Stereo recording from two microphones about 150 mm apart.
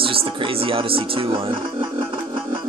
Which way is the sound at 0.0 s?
35° right (ahead or behind).